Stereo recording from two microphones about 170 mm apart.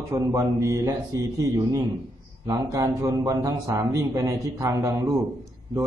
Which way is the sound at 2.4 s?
20° right (ahead or behind).